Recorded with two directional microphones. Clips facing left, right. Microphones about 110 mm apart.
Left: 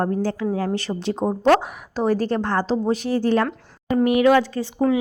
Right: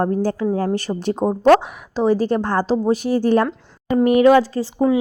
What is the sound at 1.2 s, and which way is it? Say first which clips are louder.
Speech: right 3 dB; 50° right (ahead or behind).